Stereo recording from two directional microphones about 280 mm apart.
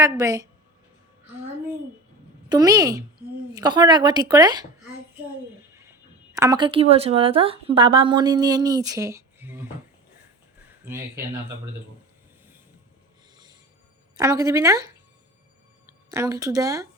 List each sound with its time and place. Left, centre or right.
0.0 s speech: centre
2.5 s speech: centre
6.3 s speech: centre
8.9 s a sound: centre
14.2 s speech: centre
16.0 s speech: centre